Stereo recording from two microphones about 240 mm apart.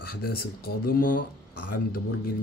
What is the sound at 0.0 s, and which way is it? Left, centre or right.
Speech, left.